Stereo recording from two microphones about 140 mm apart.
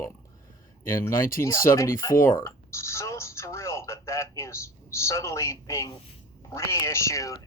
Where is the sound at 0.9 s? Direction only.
20° left (ahead or behind).